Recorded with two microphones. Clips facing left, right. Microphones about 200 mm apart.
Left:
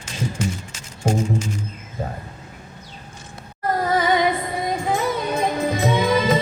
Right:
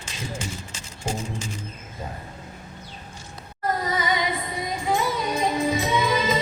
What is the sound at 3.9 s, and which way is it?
Music, 55° left (ahead or behind).